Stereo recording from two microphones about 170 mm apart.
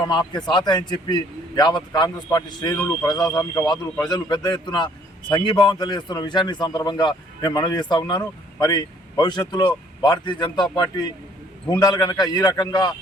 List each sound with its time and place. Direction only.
0.1 s a man's voice: 25° left (ahead or behind)